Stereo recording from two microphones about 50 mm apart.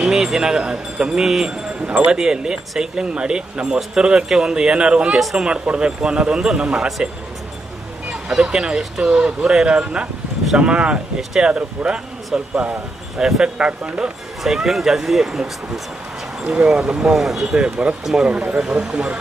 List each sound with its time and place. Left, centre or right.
0.0 s speech: centre
5.2 s speech: centre
5.5 s speech: right
8.1 s vehicle: centre
8.4 s speech: centre
11.2 s speech: centre
13.6 s speech: right
14.4 s speech: centre
17.2 s speech: centre
18.3 s speech: right